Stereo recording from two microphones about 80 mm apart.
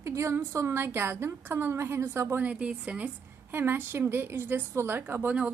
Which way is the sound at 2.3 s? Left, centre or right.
Centre.